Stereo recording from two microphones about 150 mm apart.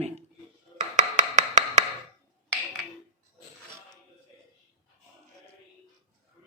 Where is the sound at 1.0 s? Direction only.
50° right (ahead or behind).